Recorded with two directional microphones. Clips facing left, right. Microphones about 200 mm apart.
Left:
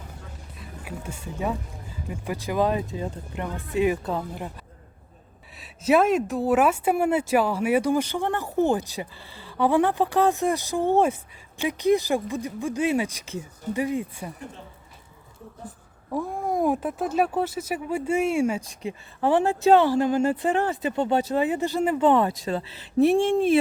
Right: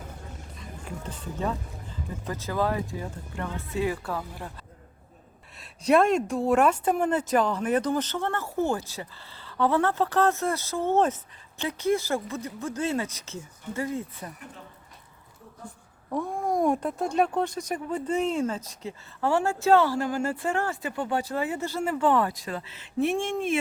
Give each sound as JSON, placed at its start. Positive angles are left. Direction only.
{"t": 0.5, "sound": "speech", "side_deg": 5}
{"t": 5.5, "sound": "speech", "side_deg": 5}
{"t": 16.0, "sound": "speech", "side_deg": 5}